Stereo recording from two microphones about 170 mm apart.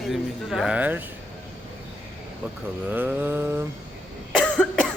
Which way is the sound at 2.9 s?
10° right (ahead or behind).